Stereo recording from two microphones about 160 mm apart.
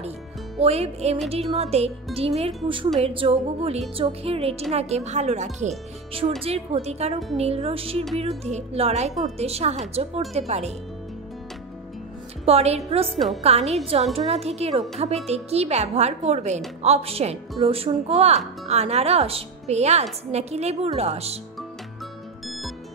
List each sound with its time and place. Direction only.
0.6 s speech: 40° right (ahead or behind)
12.4 s speech: 40° right (ahead or behind)
13.0 s a woman's voice: centre (ahead or behind)
13.4 s speech: 40° right (ahead or behind)